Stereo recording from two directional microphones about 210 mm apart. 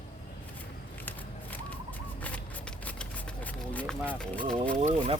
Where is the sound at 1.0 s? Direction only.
10° left (ahead or behind).